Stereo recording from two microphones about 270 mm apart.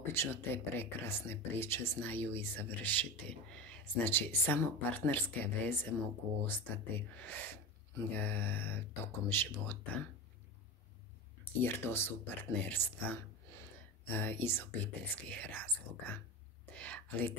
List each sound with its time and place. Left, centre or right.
0.0 s speech: centre
7.2 s speech: centre
11.6 s speech: centre